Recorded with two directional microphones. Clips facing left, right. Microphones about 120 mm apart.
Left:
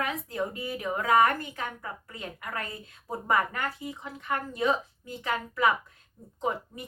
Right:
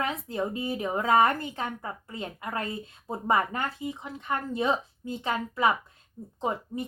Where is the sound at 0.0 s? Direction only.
25° right (ahead or behind).